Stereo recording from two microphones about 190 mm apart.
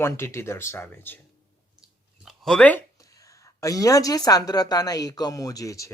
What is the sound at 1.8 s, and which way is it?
Speech, centre (ahead or behind).